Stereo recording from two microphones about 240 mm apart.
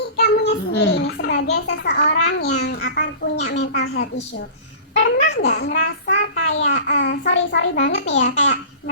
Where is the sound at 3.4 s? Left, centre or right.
Left.